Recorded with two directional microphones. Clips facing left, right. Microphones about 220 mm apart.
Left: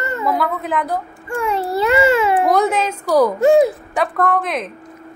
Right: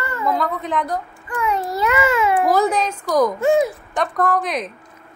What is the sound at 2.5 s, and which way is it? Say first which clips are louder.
Speech: left 1 dB; centre (ahead or behind).